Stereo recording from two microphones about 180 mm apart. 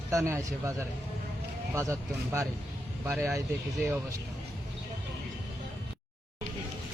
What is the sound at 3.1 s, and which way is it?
Speech, centre (ahead or behind).